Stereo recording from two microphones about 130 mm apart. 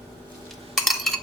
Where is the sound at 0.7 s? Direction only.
Centre (ahead or behind).